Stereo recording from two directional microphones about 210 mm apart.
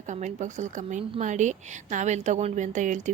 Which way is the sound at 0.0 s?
35° right (ahead or behind).